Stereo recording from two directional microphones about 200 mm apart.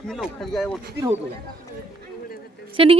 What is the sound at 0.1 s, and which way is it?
Speech, centre (ahead or behind).